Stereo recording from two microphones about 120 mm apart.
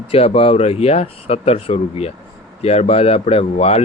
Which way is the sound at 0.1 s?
55° left (ahead or behind).